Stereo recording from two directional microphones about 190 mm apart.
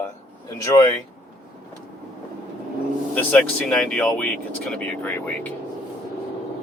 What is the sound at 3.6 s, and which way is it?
Speech, 5° left (ahead or behind).